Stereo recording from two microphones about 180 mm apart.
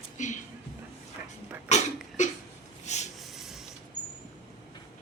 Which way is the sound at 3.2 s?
Centre (ahead or behind).